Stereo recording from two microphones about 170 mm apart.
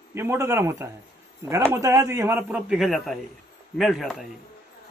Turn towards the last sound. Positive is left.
turn(degrees=0)  # may be behind; listen again after turning